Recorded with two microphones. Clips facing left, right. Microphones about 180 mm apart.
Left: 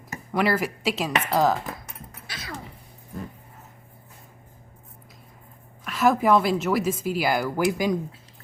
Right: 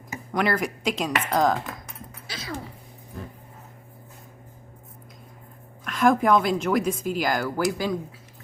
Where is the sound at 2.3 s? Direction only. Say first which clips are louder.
Right 3 dB; 25° right (ahead or behind).